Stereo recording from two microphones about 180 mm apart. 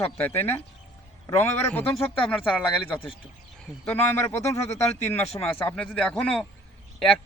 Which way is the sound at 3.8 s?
15° left (ahead or behind).